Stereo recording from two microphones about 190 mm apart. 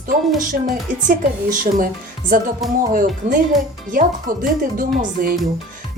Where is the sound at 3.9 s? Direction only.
45° right (ahead or behind).